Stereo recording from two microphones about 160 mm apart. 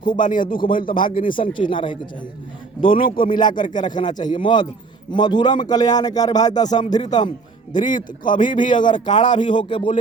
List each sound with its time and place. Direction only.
0.2 s a man's voice: 55° left (ahead or behind)
0.4 s speech: 30° left (ahead or behind)
0.7 s a man's voice: 60° left (ahead or behind)
1.3 s speech: 30° left (ahead or behind)
2.9 s a man's voice: 60° left (ahead or behind)
3.8 s a man's voice: 30° left (ahead or behind)
7.7 s a man's voice: 55° left (ahead or behind)
9.0 s a man's voice: 30° left (ahead or behind)